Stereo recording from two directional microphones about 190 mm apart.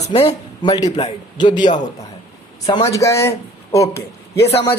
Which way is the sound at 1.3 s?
25° left (ahead or behind).